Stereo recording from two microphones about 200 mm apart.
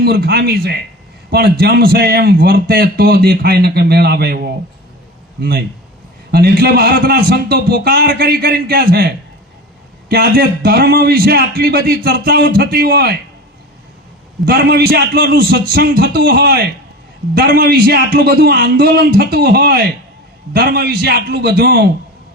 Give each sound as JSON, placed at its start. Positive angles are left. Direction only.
{"t": 0.0, "sound": "a man's voice", "side_deg": -55}
{"t": 14.4, "sound": "a man's voice", "side_deg": -55}